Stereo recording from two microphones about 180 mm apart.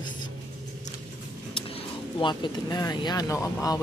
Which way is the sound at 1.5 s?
30° left (ahead or behind).